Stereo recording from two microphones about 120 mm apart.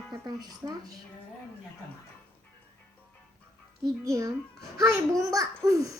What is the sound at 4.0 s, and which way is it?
A child's voice, 25° right (ahead or behind).